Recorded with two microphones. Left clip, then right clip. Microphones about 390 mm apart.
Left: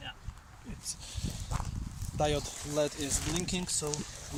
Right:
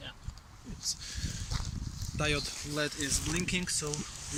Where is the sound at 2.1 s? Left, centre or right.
Centre.